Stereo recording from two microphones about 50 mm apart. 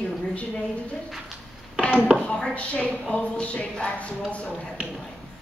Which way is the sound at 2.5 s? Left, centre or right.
Left.